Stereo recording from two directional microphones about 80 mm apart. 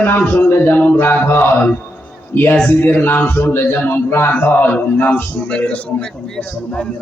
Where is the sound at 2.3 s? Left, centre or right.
Left.